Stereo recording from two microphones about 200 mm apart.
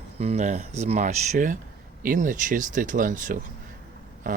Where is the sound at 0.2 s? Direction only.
35° right (ahead or behind).